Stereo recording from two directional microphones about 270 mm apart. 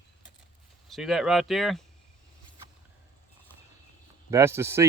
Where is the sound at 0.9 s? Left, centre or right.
Centre.